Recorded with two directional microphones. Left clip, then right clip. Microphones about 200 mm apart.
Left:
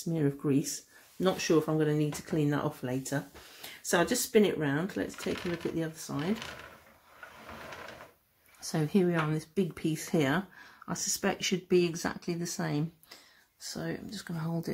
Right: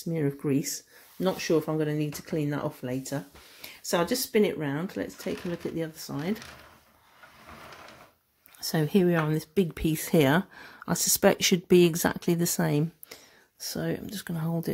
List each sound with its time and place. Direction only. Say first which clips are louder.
0.0 s speech: right 2 dB; 15° right (ahead or behind)
8.6 s speech: right 4 dB; 40° right (ahead or behind)